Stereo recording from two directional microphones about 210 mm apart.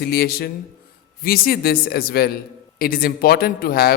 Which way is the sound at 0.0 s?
45° left (ahead or behind).